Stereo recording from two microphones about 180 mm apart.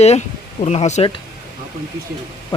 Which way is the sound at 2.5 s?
30° left (ahead or behind).